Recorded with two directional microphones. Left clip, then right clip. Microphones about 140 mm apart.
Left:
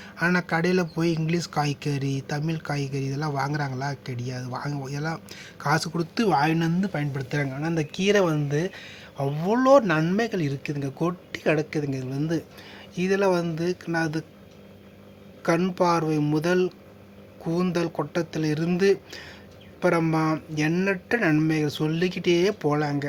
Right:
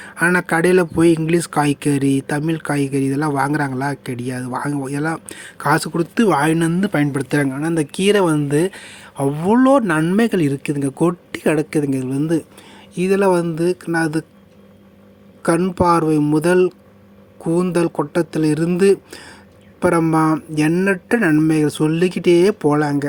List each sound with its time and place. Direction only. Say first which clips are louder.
0.0 s a sound: right 9 dB; 40° right (ahead or behind)
0.3 s a man's voice: right 10 dB; 35° right (ahead or behind)
6.3 s speech: right 6 dB; 60° right (ahead or behind)
7.4 s speech: right 8 dB; 45° right (ahead or behind)
10.2 s speech: right 9 dB; 50° right (ahead or behind)
13.0 s a man's voice: right 7 dB; 35° right (ahead or behind)
15.7 s a man's voice: right 8 dB; 40° right (ahead or behind)
21.5 s speech: right 9 dB; 40° right (ahead or behind)